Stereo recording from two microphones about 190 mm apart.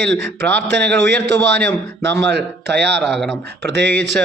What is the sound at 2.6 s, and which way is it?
Speech, 60° right (ahead or behind).